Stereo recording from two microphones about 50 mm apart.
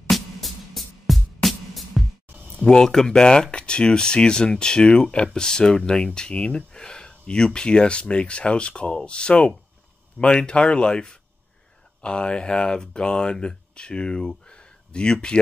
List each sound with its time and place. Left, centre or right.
0.1 s music: centre
2.6 s speech: centre